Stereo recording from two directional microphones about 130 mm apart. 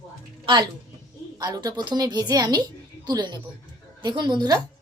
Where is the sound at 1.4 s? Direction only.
30° right (ahead or behind).